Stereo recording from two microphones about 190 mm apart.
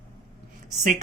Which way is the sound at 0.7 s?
40° right (ahead or behind).